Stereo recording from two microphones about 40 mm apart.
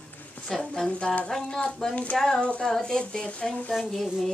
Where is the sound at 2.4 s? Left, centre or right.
Left.